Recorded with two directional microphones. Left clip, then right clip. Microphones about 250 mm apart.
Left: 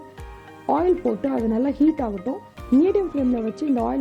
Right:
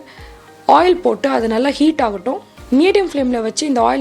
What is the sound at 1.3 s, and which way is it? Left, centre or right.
A woman's voice, centre.